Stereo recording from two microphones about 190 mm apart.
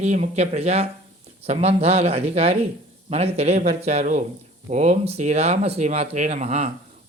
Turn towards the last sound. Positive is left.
turn(degrees=-35)  # may be behind; listen again after turning